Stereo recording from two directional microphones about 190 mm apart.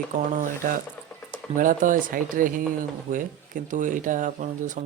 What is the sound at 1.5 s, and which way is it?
Speech, 45° right (ahead or behind).